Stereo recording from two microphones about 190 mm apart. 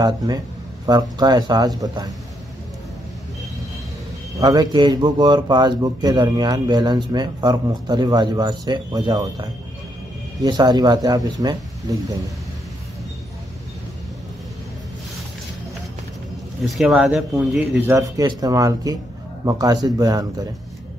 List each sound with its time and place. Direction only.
1.1 s speech: 20° right (ahead or behind)
4.4 s speech: 20° right (ahead or behind)
16.6 s speech: centre (ahead or behind); by 20.4 s 20° right (ahead or behind)